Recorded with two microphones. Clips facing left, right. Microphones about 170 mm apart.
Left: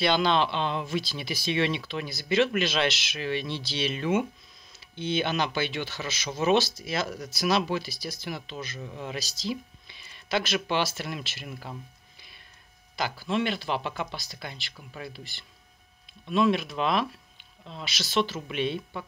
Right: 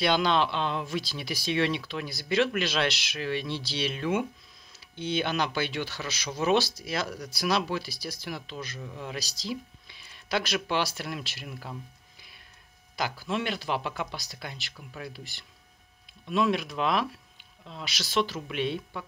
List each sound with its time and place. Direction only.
0.0 s speech: 5° right (ahead or behind)
9.2 s speech: 35° right (ahead or behind)
9.5 s a sound: centre (ahead or behind)
11.0 s speech: centre (ahead or behind)
12.9 s speech: 5° right (ahead or behind)
16.3 s speech: 5° right (ahead or behind)